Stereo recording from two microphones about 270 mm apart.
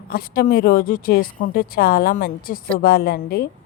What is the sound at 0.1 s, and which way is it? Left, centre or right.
A woman's voice, left.